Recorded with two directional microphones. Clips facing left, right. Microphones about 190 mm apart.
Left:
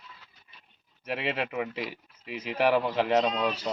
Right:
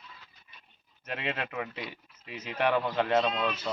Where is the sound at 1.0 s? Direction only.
5° left (ahead or behind).